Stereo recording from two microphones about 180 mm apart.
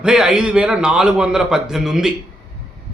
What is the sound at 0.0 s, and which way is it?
Speech, 5° right (ahead or behind).